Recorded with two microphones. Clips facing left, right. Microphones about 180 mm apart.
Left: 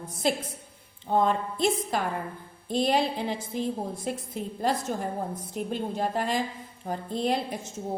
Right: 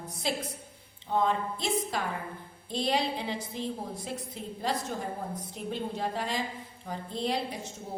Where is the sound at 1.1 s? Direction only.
50° left (ahead or behind).